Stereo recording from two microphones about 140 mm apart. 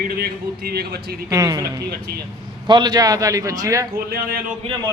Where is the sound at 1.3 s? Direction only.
25° right (ahead or behind).